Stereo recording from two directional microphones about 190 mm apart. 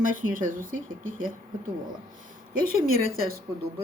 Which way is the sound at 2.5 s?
50° right (ahead or behind).